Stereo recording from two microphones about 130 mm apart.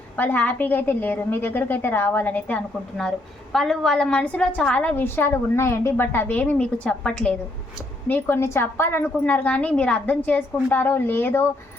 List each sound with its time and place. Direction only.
0.2 s a woman's voice: 15° left (ahead or behind)